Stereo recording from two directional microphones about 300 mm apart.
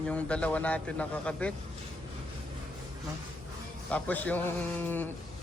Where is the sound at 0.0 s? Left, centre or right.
Centre.